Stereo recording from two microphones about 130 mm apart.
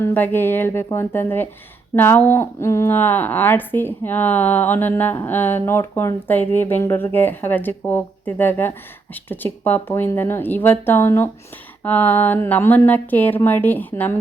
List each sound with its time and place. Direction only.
0.0 s a woman's voice: 15° left (ahead or behind)